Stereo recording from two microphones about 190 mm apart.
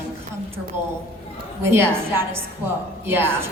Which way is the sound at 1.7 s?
10° right (ahead or behind).